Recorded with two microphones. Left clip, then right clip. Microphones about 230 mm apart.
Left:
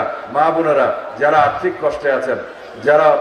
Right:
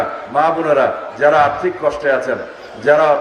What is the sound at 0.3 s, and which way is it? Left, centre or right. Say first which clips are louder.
A man's voice: even; right.